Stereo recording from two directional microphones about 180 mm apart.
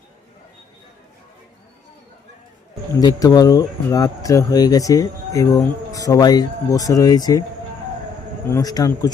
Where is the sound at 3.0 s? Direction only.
20° left (ahead or behind).